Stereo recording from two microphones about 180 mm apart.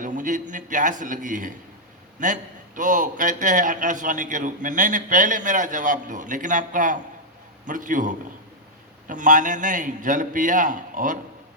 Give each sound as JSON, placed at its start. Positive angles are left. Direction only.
{"t": 0.0, "sound": "a man's voice", "side_deg": -45}